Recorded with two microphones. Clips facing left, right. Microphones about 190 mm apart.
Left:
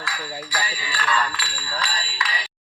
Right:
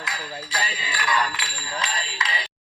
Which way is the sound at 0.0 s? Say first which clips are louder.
Left 2 dB; 25° right (ahead or behind).